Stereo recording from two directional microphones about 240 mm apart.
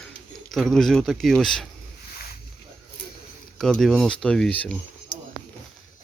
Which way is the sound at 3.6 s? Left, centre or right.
Centre.